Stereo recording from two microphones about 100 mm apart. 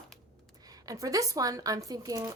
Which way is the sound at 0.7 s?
35° right (ahead or behind).